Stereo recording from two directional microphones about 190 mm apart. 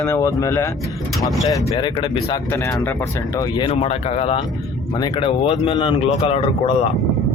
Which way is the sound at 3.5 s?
30° left (ahead or behind).